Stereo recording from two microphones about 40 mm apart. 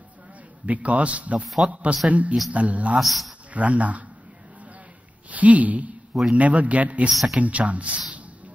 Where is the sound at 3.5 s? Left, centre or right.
Right.